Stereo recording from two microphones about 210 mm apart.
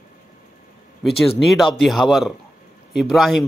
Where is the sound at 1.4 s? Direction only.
Centre (ahead or behind).